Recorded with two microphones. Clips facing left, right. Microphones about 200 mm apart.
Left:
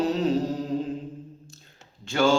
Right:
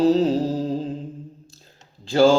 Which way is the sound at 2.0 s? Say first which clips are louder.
Right 6 dB; 35° right (ahead or behind).